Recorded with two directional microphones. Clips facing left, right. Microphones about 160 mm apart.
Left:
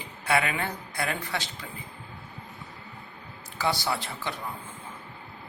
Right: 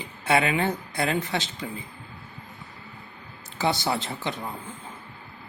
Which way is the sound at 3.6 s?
25° right (ahead or behind).